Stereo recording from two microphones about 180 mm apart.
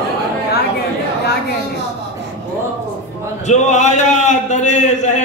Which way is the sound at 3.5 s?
40° left (ahead or behind).